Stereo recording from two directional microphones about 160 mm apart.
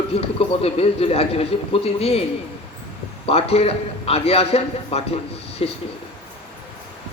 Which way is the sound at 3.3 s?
40° left (ahead or behind).